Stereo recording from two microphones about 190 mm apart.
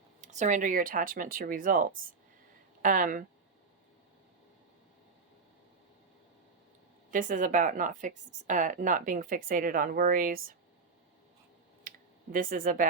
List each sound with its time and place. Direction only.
0.2 s a woman's voice: 40° right (ahead or behind)
7.1 s a woman's voice: 45° right (ahead or behind)
11.8 s a sound: 45° right (ahead or behind)